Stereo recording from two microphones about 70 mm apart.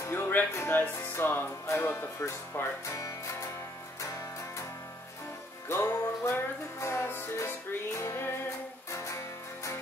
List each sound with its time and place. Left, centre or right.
0.0 s music: left
5.7 s music: left
8.9 s music: left